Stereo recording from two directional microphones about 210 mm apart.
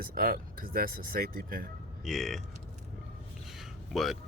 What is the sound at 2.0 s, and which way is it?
Speech, centre (ahead or behind).